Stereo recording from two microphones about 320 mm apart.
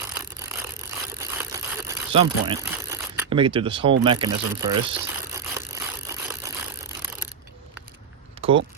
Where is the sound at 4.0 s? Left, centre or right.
Centre.